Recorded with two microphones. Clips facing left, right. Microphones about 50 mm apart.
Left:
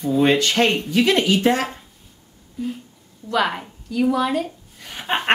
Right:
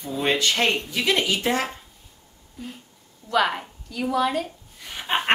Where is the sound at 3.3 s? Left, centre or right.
Centre.